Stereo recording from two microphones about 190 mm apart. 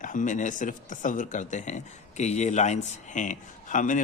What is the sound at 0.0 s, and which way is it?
Speech, 45° left (ahead or behind).